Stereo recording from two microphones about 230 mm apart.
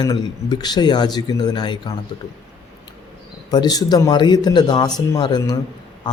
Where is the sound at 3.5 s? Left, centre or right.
Centre.